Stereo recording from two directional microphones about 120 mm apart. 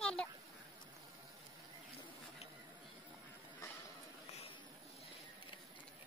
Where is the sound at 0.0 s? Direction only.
5° left (ahead or behind).